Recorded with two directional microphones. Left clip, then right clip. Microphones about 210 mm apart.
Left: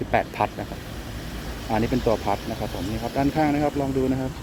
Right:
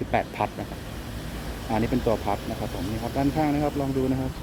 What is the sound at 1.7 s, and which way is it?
Speech, 5° left (ahead or behind).